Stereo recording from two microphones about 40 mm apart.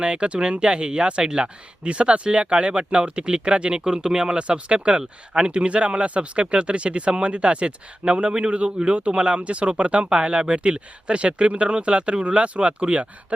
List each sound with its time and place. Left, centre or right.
0.0 s speech: right